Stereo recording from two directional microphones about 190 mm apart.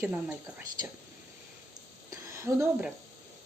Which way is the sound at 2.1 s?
15° right (ahead or behind).